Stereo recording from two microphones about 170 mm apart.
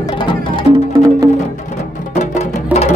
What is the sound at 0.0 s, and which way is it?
Music, 30° left (ahead or behind).